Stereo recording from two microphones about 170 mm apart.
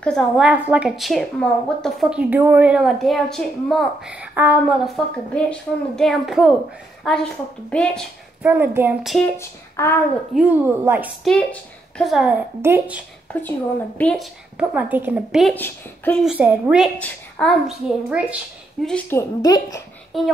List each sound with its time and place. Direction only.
0.0 s a woman's voice: 5° left (ahead or behind)
0.5 s a woman's voice: 10° right (ahead or behind)
8.4 s a woman's voice: 10° right (ahead or behind)
9.0 s a woman's voice: centre (ahead or behind)
9.4 s speech: 15° left (ahead or behind)
10.3 s a woman's voice: 10° right (ahead or behind)
11.3 s a woman's voice: centre (ahead or behind)
13.9 s a woman's voice: 5° left (ahead or behind)
15.5 s speech: 10° left (ahead or behind)
16.3 s a woman's voice: 10° right (ahead or behind)
17.0 s a woman's voice: 5° left (ahead or behind)
18.9 s speech: 10° left (ahead or behind)
20.1 s a woman's voice: centre (ahead or behind)